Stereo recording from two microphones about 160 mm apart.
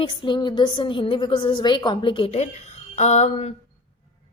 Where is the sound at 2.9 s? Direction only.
45° left (ahead or behind).